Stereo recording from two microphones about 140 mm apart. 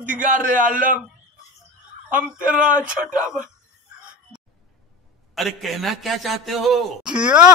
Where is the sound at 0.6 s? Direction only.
75° right (ahead or behind).